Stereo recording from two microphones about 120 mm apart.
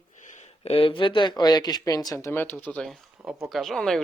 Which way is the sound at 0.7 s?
50° left (ahead or behind).